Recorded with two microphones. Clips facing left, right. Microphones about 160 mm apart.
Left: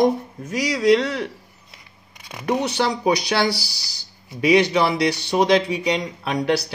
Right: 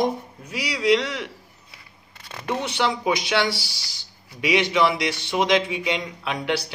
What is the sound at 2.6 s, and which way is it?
Speech, 40° left (ahead or behind).